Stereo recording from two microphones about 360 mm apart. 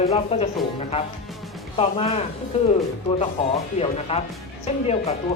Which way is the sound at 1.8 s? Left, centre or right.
Centre.